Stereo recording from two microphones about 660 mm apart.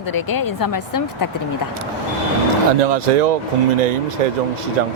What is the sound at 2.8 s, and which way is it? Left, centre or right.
Speech, right.